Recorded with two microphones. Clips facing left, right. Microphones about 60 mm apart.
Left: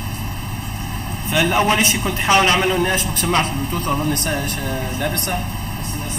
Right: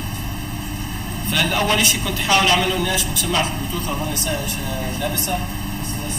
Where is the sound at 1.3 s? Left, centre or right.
Centre; by 5.2 s left.